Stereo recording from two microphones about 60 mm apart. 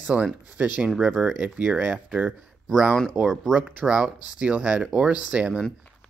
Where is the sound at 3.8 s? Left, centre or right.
Centre.